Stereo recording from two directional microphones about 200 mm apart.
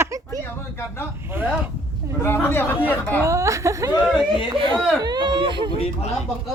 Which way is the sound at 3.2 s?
15° right (ahead or behind).